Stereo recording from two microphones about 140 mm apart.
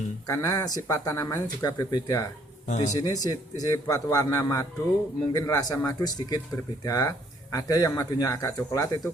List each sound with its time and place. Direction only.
0.3 s speech: 25° left (ahead or behind)
2.6 s a man's voice: 60° left (ahead or behind)
2.9 s speech: 25° left (ahead or behind)